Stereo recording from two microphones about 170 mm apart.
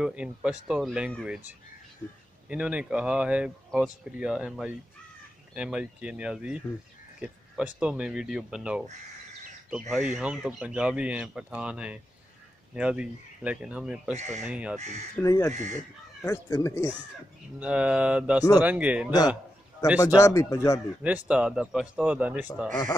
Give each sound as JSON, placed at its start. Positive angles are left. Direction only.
{"t": 0.0, "sound": "speech", "side_deg": -5}
{"t": 14.1, "sound": "speech", "side_deg": -40}
{"t": 14.4, "sound": "speech", "side_deg": -5}
{"t": 14.8, "sound": "speech", "side_deg": -40}
{"t": 15.1, "sound": "speech", "side_deg": 15}
{"t": 15.5, "sound": "speech", "side_deg": -45}
{"t": 16.3, "sound": "speech", "side_deg": 15}
{"t": 17.6, "sound": "speech", "side_deg": -5}
{"t": 20.2, "sound": "speech", "side_deg": 15}
{"t": 21.0, "sound": "speech", "side_deg": -10}